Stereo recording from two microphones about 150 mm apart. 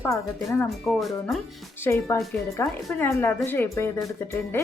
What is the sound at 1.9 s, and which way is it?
Speech, 20° left (ahead or behind).